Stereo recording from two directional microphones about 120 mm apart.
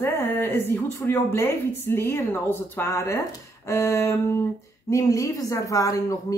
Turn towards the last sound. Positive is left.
turn(degrees=30)  # may be behind; listen again after turning